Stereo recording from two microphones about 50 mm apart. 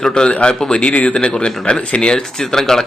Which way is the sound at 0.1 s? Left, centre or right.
Left.